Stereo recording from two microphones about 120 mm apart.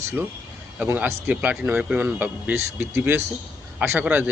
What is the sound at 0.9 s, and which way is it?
Speech, 15° right (ahead or behind).